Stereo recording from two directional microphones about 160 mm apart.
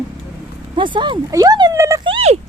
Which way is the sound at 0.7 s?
30° right (ahead or behind).